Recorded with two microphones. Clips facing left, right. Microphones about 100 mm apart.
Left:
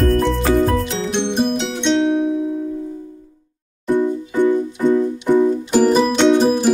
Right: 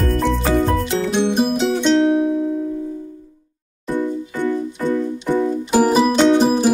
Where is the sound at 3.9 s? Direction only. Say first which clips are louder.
Left 4 dB; 20° left (ahead or behind).